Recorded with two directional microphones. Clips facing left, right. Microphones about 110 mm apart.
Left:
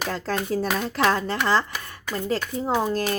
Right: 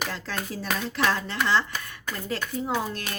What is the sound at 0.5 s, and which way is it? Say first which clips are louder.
Speech: left 5 dB; 45° left (ahead or behind).